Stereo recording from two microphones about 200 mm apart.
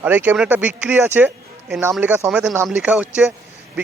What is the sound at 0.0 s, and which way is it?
A man's voice, 10° right (ahead or behind).